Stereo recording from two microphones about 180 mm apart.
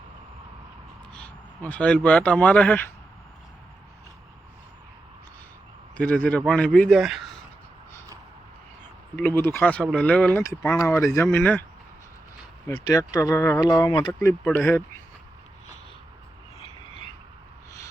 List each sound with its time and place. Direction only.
1.1 s speech: 10° left (ahead or behind)
6.0 s speech: 5° left (ahead or behind)
9.1 s speech: 10° left (ahead or behind)
12.6 s speech: 15° left (ahead or behind)
14.2 s speech: 10° left (ahead or behind)